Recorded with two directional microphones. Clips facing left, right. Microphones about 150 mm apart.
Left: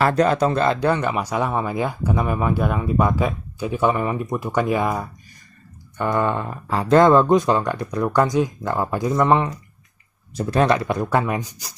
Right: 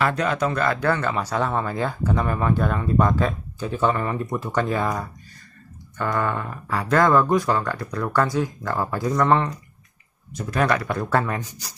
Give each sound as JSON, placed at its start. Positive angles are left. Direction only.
{"t": 0.0, "sound": "speech", "side_deg": 35}